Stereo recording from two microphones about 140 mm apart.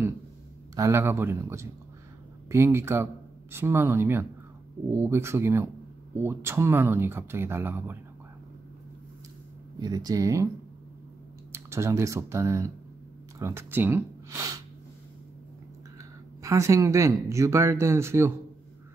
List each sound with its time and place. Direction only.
0.7 s speech: 20° right (ahead or behind)
9.8 s speech: 30° right (ahead or behind)
11.5 s speech: 20° right (ahead or behind)
16.4 s speech: 20° right (ahead or behind)